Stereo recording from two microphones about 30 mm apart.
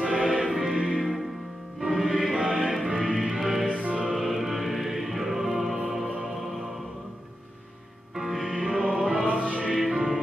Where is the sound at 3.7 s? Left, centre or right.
Right.